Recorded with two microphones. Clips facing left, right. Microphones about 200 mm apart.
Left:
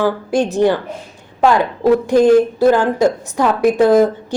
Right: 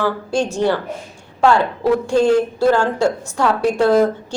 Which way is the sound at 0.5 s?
15° left (ahead or behind).